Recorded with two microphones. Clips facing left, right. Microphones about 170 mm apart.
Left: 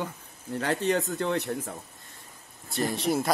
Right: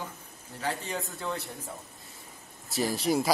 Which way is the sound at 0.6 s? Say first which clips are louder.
Left 7 dB; 70° left (ahead or behind).